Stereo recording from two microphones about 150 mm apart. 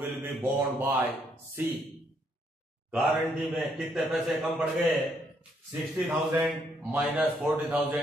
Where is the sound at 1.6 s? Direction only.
15° right (ahead or behind).